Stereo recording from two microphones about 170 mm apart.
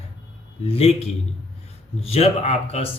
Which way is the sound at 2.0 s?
35° left (ahead or behind).